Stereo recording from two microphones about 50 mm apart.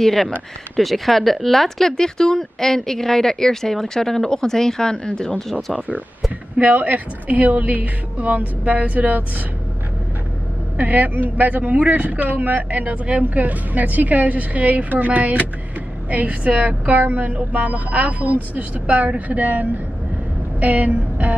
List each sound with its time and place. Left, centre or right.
0.0 s speech: centre
5.8 s a man's voice: right
10.8 s a man's voice: right